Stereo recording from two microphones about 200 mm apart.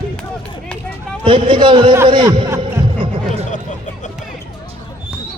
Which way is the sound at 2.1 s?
25° right (ahead or behind).